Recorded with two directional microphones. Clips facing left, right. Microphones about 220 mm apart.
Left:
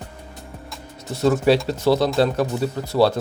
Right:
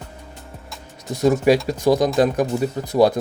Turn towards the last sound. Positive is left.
turn(degrees=-15)  # may be behind; listen again after turning